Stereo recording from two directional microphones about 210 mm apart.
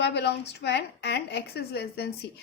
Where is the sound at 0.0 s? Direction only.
55° left (ahead or behind).